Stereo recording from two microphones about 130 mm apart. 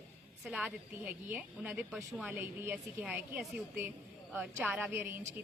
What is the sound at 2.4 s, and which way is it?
A woman's voice, 15° right (ahead or behind).